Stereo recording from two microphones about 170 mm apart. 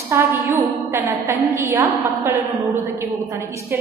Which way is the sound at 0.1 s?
15° right (ahead or behind).